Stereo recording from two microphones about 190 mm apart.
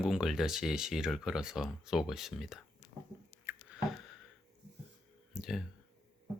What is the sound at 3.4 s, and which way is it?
Squish, 5° right (ahead or behind).